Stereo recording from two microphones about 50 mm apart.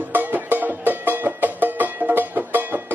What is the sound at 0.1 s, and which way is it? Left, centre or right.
Music, right.